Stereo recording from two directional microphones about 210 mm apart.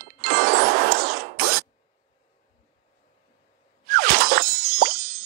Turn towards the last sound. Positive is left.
turn(degrees=-45)  # may be behind; listen again after turning